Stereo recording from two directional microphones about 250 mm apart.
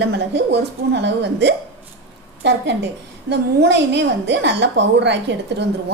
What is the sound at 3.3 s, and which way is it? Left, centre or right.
A woman's voice, right.